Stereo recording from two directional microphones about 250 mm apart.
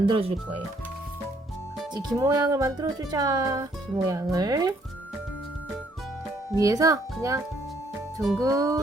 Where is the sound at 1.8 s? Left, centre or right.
Centre.